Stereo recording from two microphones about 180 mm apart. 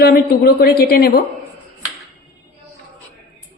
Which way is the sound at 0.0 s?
60° left (ahead or behind).